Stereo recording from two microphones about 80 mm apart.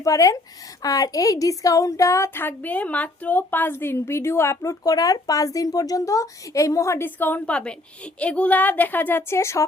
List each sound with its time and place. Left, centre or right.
0.0 s speech: left
4.8 s speech: left
7.2 s a woman's voice: left
9.3 s speech: left